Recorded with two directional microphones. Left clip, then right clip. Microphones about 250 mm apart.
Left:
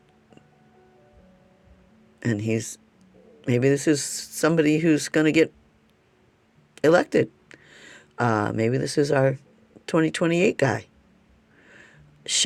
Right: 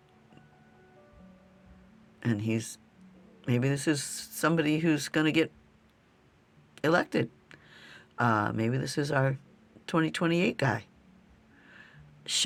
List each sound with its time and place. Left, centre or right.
2.2 s speech: centre
6.7 s speech: centre
11.6 s a sound: centre